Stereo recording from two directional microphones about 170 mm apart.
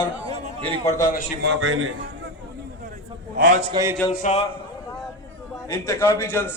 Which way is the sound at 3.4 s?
50° right (ahead or behind).